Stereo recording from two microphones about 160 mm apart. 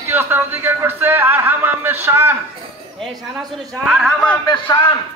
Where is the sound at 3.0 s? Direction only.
Centre (ahead or behind).